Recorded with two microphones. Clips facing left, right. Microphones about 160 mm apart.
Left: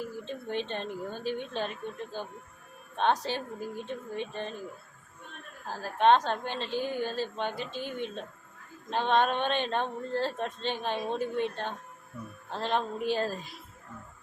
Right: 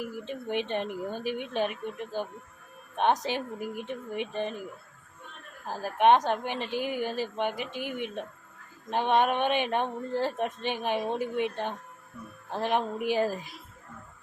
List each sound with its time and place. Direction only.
0.0 s a woman's voice: 15° right (ahead or behind)
2.9 s a woman's voice: 15° right (ahead or behind)
5.6 s a woman's voice: 15° right (ahead or behind)